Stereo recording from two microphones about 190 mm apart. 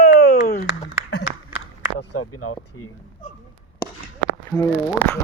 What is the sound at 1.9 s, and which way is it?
Speech, 65° left (ahead or behind).